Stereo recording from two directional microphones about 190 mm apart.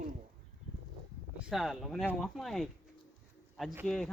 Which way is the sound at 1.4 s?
Centre (ahead or behind).